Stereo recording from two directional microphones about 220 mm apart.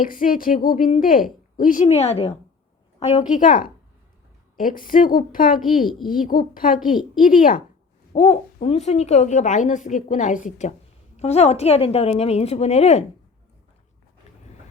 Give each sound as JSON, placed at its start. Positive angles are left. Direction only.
{"t": 0.0, "sound": "a woman's voice", "side_deg": 40}
{"t": 8.1, "sound": "a woman's voice", "side_deg": 25}